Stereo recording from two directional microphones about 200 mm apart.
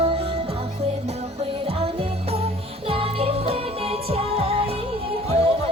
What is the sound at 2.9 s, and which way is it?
Music, 30° right (ahead or behind).